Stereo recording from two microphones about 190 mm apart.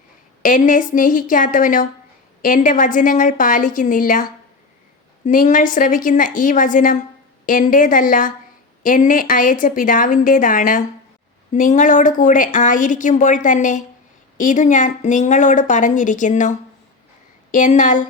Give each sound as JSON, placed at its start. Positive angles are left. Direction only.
{"t": 0.4, "sound": "a woman's voice", "side_deg": 45}